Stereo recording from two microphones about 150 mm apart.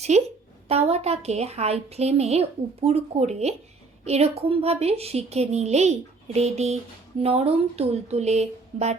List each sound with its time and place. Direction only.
0.1 s a woman's voice: 45° right (ahead or behind)